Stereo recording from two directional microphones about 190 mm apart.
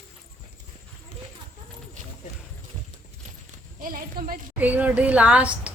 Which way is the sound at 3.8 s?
45° right (ahead or behind).